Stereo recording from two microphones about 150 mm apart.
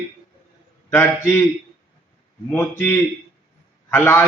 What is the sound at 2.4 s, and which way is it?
Speech, 10° left (ahead or behind).